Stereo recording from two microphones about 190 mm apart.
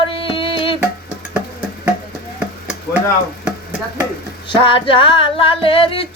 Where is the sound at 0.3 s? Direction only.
25° left (ahead or behind).